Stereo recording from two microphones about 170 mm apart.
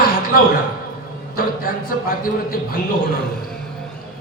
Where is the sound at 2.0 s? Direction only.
55° left (ahead or behind).